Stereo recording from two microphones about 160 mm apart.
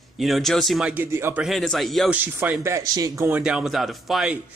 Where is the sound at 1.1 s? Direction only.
15° right (ahead or behind).